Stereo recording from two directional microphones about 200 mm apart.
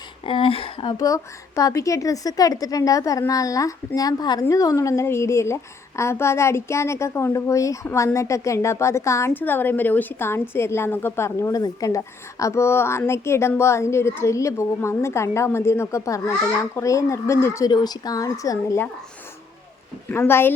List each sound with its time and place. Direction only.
0.3 s speech: 25° left (ahead or behind)
0.9 s a child's voice: 15° left (ahead or behind)
20.1 s a child's voice: 10° left (ahead or behind)